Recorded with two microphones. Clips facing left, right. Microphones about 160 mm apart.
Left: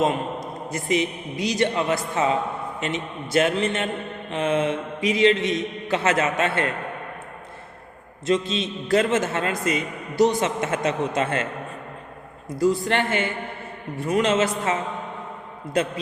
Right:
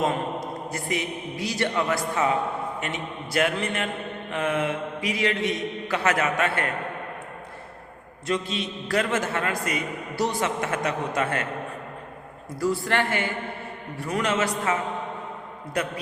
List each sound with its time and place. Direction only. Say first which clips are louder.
0.0 s a man's voice: left 2 dB; 20° left (ahead or behind)
8.3 s a man's voice: left 5 dB; 25° left (ahead or behind)
12.5 s a man's voice: left 3 dB; 20° left (ahead or behind)